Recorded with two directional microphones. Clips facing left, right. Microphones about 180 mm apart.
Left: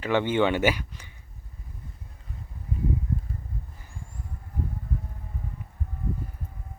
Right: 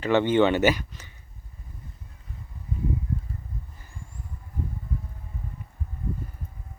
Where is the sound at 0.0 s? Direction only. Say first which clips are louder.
Right 3 dB; 10° left (ahead or behind).